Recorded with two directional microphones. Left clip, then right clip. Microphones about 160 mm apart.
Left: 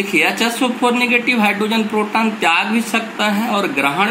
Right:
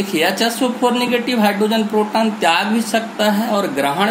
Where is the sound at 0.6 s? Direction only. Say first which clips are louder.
Left 1 dB; 50° right (ahead or behind).